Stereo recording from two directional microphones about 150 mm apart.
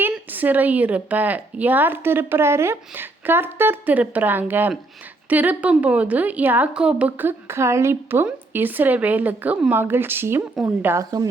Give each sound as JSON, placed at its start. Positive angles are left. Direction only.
{"t": 0.0, "sound": "a woman's voice", "side_deg": -10}